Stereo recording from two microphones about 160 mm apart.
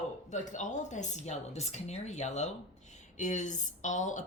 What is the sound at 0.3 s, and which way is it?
Speech, 50° left (ahead or behind).